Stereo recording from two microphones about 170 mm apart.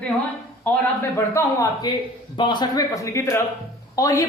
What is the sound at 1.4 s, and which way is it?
A man's voice, 25° left (ahead or behind).